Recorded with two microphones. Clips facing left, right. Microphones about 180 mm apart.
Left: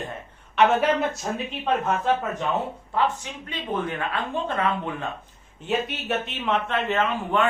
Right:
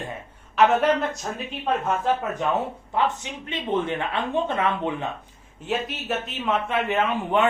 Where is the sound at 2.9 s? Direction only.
20° right (ahead or behind).